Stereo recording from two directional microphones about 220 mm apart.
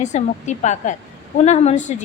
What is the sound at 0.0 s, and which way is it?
A woman's voice, 30° left (ahead or behind).